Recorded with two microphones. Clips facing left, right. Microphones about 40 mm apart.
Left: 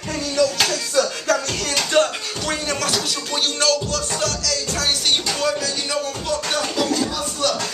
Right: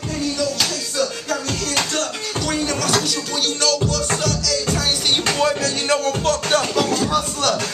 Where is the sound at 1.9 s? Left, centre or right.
Centre.